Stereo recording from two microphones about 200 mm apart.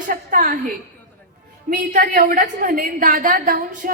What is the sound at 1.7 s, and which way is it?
A woman's voice, 45° right (ahead or behind).